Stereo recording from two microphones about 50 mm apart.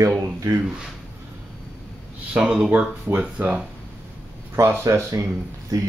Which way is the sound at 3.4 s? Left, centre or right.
Right.